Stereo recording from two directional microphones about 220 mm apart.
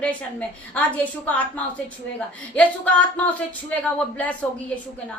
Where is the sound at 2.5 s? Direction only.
5° left (ahead or behind).